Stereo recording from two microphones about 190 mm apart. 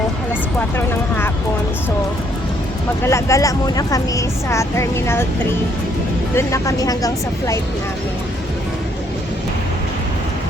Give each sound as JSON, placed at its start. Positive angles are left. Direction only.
{"t": 0.8, "sound": "speech", "side_deg": 10}
{"t": 3.0, "sound": "speech", "side_deg": 15}
{"t": 6.3, "sound": "speech", "side_deg": 15}